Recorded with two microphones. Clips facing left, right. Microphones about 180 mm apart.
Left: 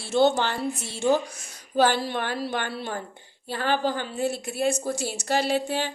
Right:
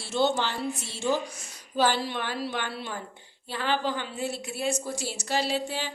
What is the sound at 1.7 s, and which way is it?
A woman's voice, 50° left (ahead or behind).